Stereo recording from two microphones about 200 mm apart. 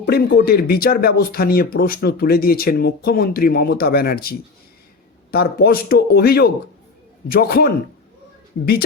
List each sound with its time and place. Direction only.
0.0 s speech: 50° left (ahead or behind)